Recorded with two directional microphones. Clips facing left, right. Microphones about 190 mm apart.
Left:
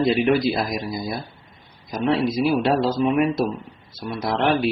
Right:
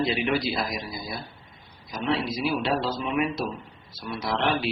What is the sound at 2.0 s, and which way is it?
Speech, 50° left (ahead or behind).